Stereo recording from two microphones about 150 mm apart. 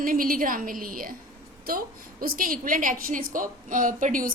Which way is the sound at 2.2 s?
75° right (ahead or behind).